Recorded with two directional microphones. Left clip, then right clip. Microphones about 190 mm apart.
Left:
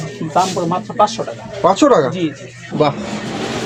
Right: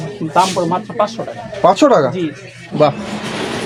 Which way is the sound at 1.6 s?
55° right (ahead or behind).